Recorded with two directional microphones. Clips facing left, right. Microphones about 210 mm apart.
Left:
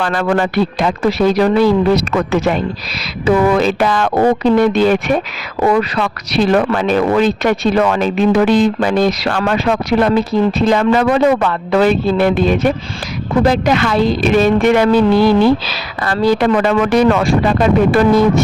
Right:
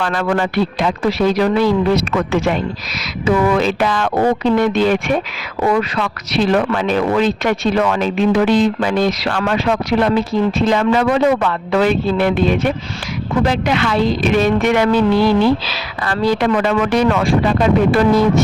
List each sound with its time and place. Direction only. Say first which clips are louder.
0.0 s speech: left 2 dB; 35° left (ahead or behind)